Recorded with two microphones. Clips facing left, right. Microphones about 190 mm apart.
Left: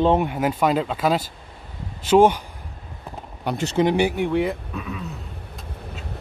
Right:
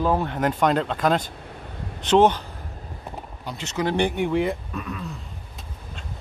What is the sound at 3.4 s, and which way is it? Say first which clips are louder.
Speech: left 11 dB; 65° left (ahead or behind).